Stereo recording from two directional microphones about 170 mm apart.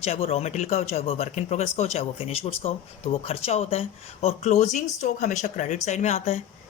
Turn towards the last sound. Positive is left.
turn(degrees=40)  # may be behind; listen again after turning